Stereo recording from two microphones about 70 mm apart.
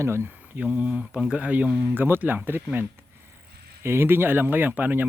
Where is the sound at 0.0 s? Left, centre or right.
Right.